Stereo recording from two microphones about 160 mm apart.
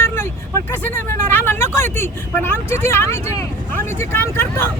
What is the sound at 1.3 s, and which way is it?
Speech, 15° left (ahead or behind).